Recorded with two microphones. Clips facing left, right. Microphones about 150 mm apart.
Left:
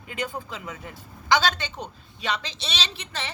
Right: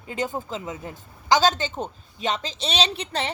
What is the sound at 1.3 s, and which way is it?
A woman's voice, 40° right (ahead or behind).